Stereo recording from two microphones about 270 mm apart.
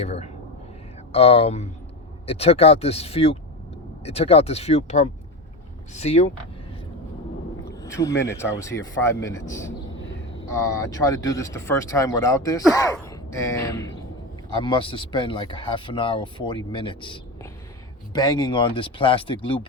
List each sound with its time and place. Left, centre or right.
0.0 s speech: left
7.8 s a sound: centre
8.2 s speech: centre